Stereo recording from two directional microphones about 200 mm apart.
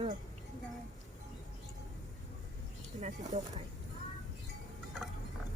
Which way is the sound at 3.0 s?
35° right (ahead or behind).